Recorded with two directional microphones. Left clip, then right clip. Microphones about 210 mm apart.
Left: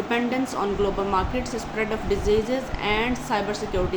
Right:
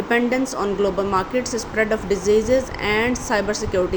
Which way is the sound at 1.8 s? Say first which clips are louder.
Right 5 dB; 25° right (ahead or behind).